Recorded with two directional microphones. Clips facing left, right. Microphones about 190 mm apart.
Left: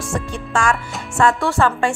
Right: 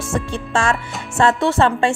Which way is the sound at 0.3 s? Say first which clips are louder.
Left 1 dB; 25° right (ahead or behind).